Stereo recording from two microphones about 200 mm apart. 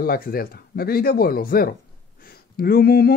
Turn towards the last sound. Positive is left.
turn(degrees=50)  # may be behind; listen again after turning